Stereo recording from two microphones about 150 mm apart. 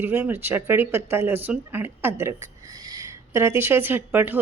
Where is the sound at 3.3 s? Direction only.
15° right (ahead or behind).